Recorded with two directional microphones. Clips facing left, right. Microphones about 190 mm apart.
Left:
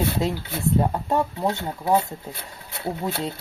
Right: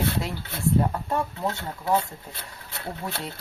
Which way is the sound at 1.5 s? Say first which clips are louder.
Left 2 dB; 25° left (ahead or behind).